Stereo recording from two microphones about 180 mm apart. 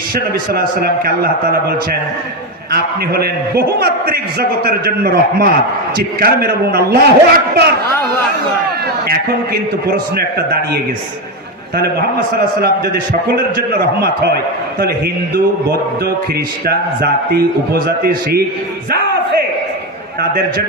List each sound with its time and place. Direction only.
0.1 s a man's voice: 55° right (ahead or behind)
2.7 s a man's voice: 60° right (ahead or behind)
10.2 s a man's voice: 60° right (ahead or behind)
12.6 s a man's voice: 60° right (ahead or behind)
16.6 s a man's voice: 60° right (ahead or behind)